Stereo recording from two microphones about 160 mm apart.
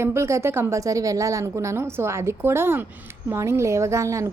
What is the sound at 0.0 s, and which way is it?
A woman's voice, 15° right (ahead or behind).